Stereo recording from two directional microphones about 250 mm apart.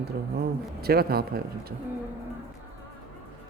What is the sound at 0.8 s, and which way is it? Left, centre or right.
Speech, right.